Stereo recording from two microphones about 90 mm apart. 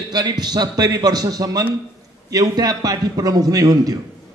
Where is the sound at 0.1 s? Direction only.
50° right (ahead or behind).